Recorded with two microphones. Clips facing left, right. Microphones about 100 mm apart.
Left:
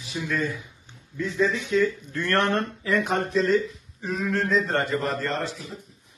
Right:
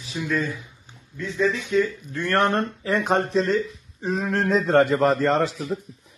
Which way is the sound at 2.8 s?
35° right (ahead or behind).